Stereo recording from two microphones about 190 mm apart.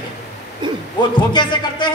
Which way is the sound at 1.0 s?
25° left (ahead or behind).